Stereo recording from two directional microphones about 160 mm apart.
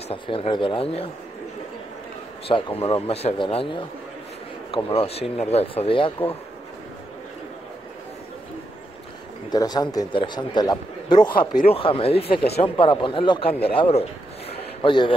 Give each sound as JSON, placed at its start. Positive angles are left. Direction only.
{"t": 0.1, "sound": "speech", "side_deg": 35}
{"t": 2.4, "sound": "speech", "side_deg": 35}
{"t": 9.5, "sound": "a man's voice", "side_deg": 25}
{"t": 11.3, "sound": "speech", "side_deg": 65}
{"t": 11.7, "sound": "speech", "side_deg": 35}